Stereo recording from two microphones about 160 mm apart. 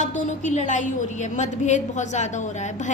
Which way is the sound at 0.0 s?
50° left (ahead or behind).